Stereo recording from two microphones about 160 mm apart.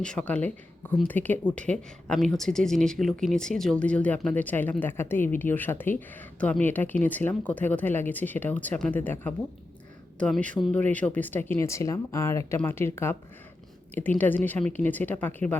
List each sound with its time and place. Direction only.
0.0 s speech: 5° left (ahead or behind)
10.2 s speech: 5° left (ahead or behind)
14.2 s speech: 10° left (ahead or behind)